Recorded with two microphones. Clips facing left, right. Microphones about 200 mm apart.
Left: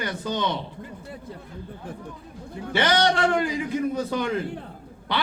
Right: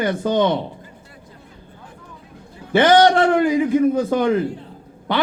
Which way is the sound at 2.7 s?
50° right (ahead or behind).